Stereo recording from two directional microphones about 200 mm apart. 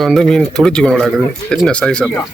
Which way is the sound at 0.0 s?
Centre (ahead or behind).